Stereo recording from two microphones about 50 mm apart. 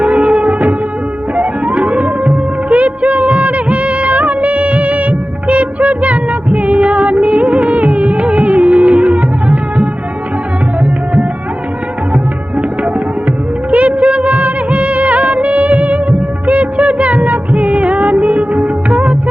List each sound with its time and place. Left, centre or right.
0.0 s music of bollywood: right
1.4 s music: right
12.1 s tabla: right
13.7 s music of bollywood: right